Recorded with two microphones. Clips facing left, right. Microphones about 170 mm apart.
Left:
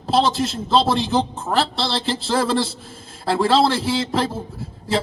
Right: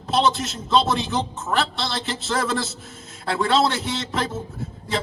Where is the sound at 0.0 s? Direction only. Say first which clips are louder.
Left 3 dB; 30° left (ahead or behind).